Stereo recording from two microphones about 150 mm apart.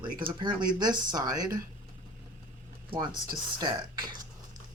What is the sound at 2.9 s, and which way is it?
Speech, 30° right (ahead or behind).